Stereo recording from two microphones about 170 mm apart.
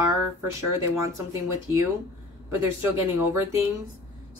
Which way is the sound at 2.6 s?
15° right (ahead or behind).